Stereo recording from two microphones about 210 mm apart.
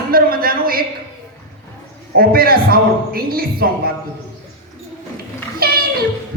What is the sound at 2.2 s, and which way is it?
Speech, 45° right (ahead or behind).